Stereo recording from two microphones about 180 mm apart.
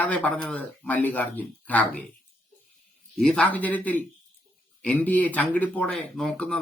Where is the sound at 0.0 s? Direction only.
10° left (ahead or behind).